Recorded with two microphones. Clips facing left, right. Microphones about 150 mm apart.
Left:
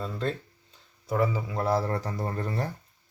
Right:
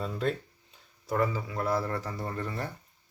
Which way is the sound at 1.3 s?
25° left (ahead or behind).